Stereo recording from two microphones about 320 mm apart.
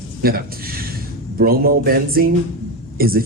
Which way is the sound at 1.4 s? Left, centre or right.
Right.